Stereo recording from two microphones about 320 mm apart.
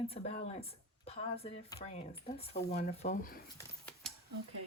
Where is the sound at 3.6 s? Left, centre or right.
Centre.